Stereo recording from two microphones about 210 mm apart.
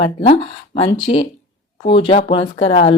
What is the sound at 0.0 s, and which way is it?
Speech, 25° left (ahead or behind).